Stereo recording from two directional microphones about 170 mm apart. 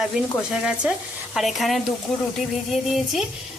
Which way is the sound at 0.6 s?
5° right (ahead or behind).